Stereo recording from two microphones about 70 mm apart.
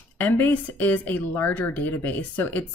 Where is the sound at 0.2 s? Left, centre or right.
Left.